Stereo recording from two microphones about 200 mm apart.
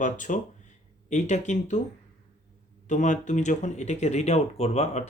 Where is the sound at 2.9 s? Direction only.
35° left (ahead or behind).